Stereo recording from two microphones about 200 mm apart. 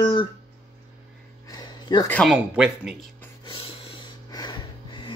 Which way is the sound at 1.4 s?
20° left (ahead or behind).